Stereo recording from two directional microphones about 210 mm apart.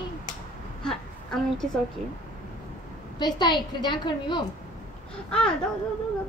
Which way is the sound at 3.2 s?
20° left (ahead or behind).